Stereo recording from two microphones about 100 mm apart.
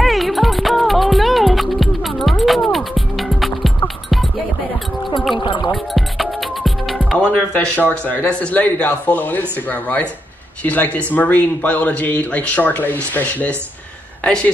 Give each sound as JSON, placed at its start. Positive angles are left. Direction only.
{"t": 0.0, "sound": "music", "side_deg": 0}
{"t": 5.4, "sound": "music", "side_deg": 55}
{"t": 5.7, "sound": "music", "side_deg": 0}
{"t": 7.2, "sound": "speech", "side_deg": 10}